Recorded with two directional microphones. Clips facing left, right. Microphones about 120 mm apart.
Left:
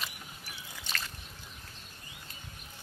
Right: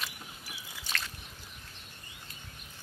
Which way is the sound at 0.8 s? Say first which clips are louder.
Right 1 dB; centre (ahead or behind).